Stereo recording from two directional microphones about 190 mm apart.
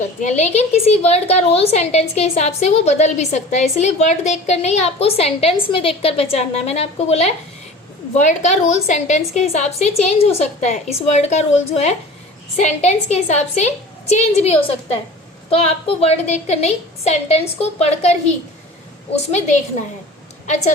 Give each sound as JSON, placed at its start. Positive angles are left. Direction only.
{"t": 0.2, "sound": "a woman's voice", "side_deg": 35}